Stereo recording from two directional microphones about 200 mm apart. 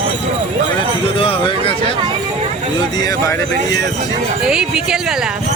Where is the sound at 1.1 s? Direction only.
25° left (ahead or behind).